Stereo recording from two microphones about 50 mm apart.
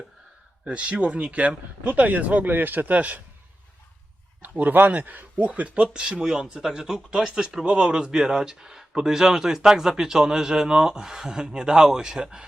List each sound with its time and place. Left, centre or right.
0.6 s speech: right
4.7 s speech: right; by 7.6 s centre
7.6 s speech: centre